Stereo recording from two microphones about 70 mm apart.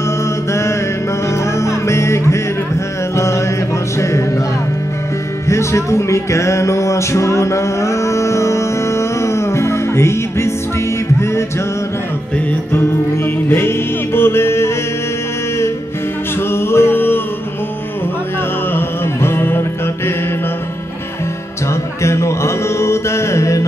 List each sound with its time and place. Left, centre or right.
0.5 s mantra: left
1.6 s music: left
5.5 s music: left
12.7 s music: left
16.5 s music: left
18.7 s music: left
22.0 s music: left